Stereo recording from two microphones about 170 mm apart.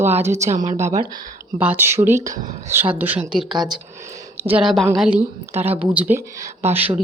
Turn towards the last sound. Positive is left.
turn(degrees=-10)  # may be behind; listen again after turning